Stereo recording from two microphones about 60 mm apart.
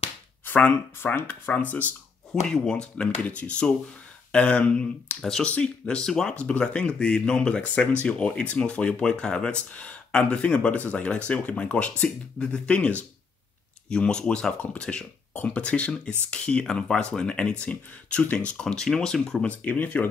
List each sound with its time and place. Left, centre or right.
0.5 s speech: left
2.4 s speech: centre
5.2 s speech: centre
19.4 s speech: left